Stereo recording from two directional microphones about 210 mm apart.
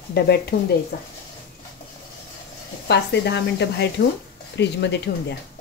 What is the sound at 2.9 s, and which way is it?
Speech, 55° left (ahead or behind).